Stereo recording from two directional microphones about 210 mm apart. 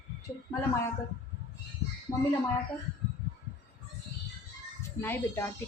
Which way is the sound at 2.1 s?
15° left (ahead or behind).